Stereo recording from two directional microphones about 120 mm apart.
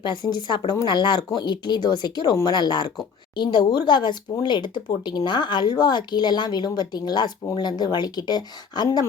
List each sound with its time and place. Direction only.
0.0 s speech: 40° left (ahead or behind)